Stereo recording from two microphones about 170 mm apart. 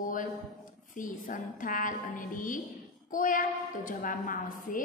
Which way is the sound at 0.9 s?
50° left (ahead or behind).